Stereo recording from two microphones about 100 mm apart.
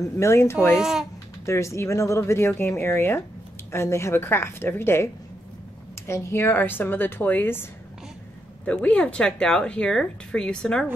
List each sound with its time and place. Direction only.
0.2 s speech: 25° left (ahead or behind)
0.7 s speech: 5° right (ahead or behind)
1.4 s speech: 30° left (ahead or behind)
8.6 s speech: 10° left (ahead or behind)